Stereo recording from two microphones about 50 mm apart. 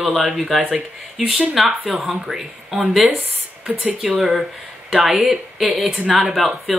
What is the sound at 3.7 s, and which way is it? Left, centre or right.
Speech, right.